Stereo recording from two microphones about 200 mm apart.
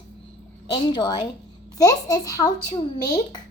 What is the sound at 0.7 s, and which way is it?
A child's voice, 20° left (ahead or behind).